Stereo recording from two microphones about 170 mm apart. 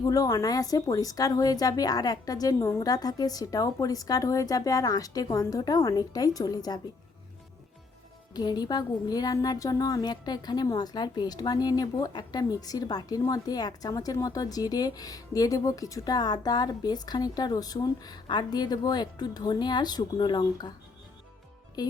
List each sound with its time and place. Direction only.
0.0 s speech: 20° left (ahead or behind)
8.3 s speech: 25° left (ahead or behind)
21.8 s speech: 25° left (ahead or behind)